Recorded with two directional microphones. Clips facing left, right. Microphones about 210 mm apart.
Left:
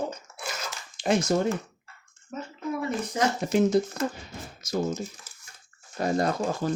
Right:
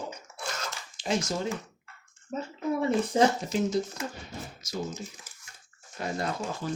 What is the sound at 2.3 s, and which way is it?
Speech, 30° right (ahead or behind).